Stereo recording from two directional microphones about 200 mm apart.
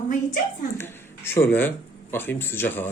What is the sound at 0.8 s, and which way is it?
Speech, 10° left (ahead or behind).